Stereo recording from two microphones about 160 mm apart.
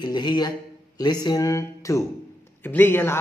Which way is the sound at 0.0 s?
25° left (ahead or behind).